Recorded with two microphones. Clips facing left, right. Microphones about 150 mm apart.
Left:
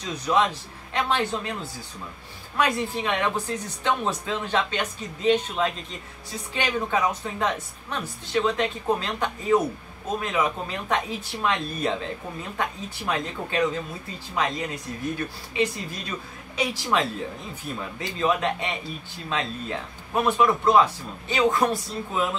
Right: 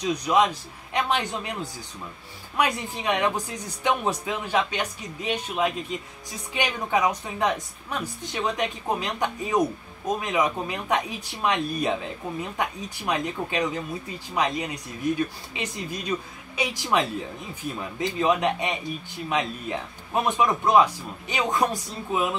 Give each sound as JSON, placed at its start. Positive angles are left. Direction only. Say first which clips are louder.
{"t": 0.0, "sound": "speech", "louder": "right 2 dB", "side_deg": -15}